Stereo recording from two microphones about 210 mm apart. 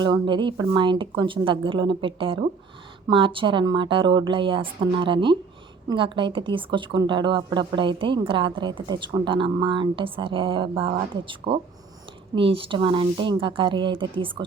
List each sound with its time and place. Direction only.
0.0 s a woman's voice: 20° right (ahead or behind)